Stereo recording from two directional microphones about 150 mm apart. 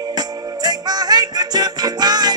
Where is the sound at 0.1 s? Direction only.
25° right (ahead or behind).